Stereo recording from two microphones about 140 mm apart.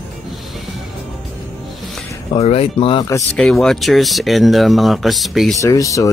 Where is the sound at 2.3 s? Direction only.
45° left (ahead or behind).